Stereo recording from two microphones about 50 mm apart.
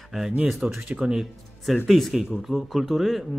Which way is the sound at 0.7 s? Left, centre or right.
Right.